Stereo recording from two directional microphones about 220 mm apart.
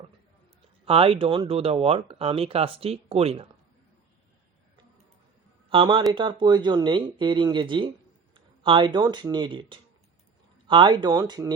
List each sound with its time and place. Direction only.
0.9 s speech: 25° right (ahead or behind)
5.6 s speech: 25° right (ahead or behind)